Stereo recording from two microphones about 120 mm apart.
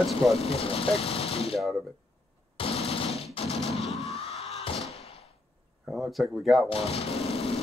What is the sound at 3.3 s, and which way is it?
Gunshot, 60° left (ahead or behind).